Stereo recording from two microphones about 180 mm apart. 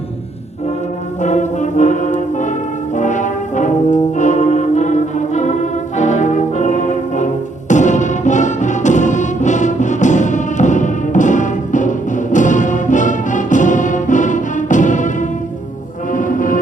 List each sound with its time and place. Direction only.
1.2 s brass instrument: 40° left (ahead or behind)
7.7 s music: 40° left (ahead or behind)